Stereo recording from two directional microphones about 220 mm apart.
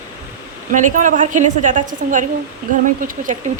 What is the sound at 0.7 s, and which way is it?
Speech, 35° right (ahead or behind).